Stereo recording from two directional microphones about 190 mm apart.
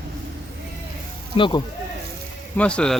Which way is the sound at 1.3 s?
25° left (ahead or behind).